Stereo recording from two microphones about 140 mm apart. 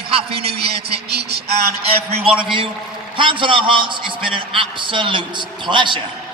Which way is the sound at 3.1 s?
35° right (ahead or behind).